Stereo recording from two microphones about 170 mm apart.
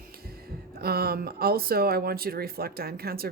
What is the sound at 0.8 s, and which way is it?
Speech, 65° right (ahead or behind).